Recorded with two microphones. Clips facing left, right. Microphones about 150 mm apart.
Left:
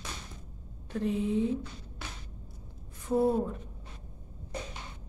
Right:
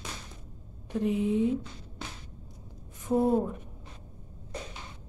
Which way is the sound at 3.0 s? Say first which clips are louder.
Right 2 dB; 20° right (ahead or behind).